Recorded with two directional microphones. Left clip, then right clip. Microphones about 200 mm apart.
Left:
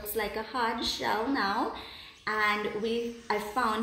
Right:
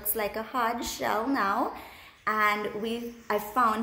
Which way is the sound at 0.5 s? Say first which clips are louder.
Right 1 dB; 40° right (ahead or behind).